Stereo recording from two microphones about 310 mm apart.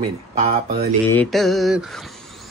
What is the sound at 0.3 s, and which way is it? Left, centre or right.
Speech, right.